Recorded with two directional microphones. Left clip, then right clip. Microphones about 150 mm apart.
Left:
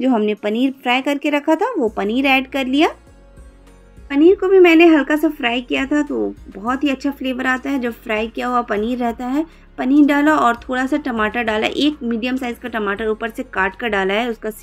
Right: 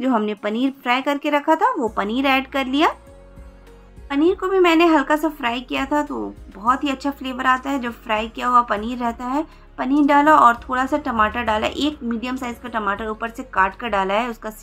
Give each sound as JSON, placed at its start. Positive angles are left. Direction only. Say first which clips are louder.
{"t": 0.0, "sound": "speech", "louder": "left 3 dB", "side_deg": 10}
{"t": 4.1, "sound": "speech", "louder": "left 6 dB", "side_deg": 20}